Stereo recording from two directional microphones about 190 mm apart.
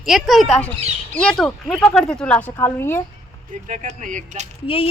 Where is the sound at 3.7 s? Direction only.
40° right (ahead or behind).